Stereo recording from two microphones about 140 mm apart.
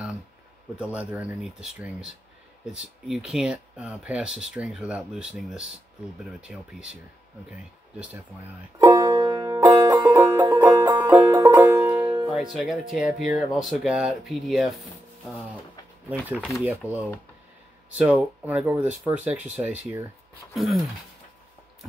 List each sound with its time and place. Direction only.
0.7 s speech: 10° right (ahead or behind)
8.7 s music: 30° right (ahead or behind)
10.1 s banjo: 15° right (ahead or behind)
11.8 s banjo: 10° right (ahead or behind)
12.3 s speech: centre (ahead or behind)
16.3 s speech: 5° right (ahead or behind)
16.8 s speech: 15° left (ahead or behind)
18.1 s speech: 10° right (ahead or behind)
20.5 s speech: centre (ahead or behind)